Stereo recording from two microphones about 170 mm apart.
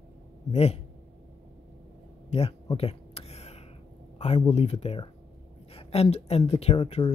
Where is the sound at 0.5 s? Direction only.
40° left (ahead or behind).